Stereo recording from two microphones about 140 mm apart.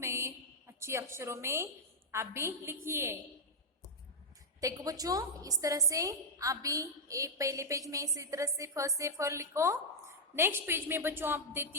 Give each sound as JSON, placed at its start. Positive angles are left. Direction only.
{"t": 0.0, "sound": "a sound", "side_deg": -20}
{"t": 2.1, "sound": "a woman's voice", "side_deg": -20}
{"t": 4.6, "sound": "a woman's voice", "side_deg": -25}